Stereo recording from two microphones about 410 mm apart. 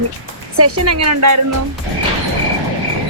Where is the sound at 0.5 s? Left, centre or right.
Right.